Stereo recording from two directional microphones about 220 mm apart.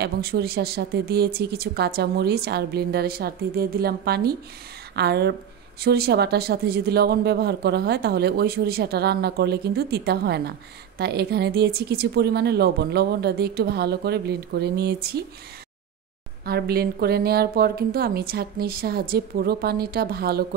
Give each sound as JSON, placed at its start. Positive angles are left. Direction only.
{"t": 0.0, "sound": "speech", "side_deg": -45}
{"t": 16.4, "sound": "speech", "side_deg": -45}